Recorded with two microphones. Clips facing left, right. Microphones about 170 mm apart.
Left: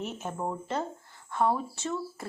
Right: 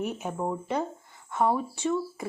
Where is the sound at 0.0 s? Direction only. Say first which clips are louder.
Right 3 dB; 5° right (ahead or behind).